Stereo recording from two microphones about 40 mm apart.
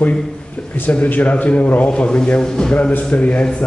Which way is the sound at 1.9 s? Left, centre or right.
Left.